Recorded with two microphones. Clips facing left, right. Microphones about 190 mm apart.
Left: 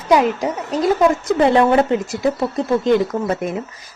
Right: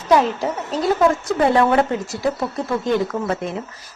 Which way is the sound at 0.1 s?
15° left (ahead or behind).